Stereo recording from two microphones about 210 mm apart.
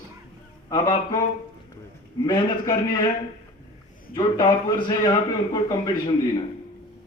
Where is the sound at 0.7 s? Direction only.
20° left (ahead or behind).